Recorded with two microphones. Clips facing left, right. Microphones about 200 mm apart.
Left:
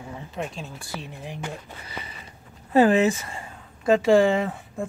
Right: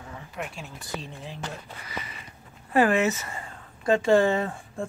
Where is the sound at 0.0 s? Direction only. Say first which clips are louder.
Left 4 dB; 20° left (ahead or behind).